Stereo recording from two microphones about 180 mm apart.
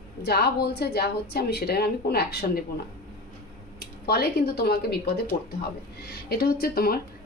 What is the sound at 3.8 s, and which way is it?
A woman's voice, 60° left (ahead or behind).